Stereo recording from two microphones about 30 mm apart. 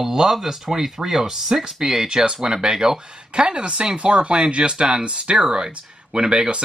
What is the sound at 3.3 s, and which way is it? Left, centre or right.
Speech, right.